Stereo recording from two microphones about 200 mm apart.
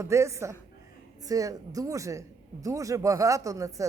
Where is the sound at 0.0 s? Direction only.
15° right (ahead or behind).